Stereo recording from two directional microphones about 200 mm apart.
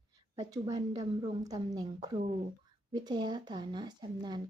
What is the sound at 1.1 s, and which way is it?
A woman's voice, 20° right (ahead or behind).